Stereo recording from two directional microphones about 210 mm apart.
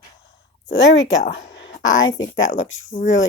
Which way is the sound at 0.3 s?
60° left (ahead or behind).